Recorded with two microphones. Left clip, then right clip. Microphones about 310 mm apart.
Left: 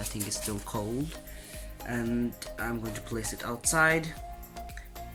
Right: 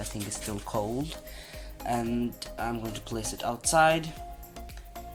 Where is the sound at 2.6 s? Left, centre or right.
Centre.